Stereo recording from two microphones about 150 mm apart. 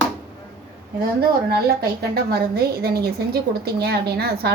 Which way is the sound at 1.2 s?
90° right.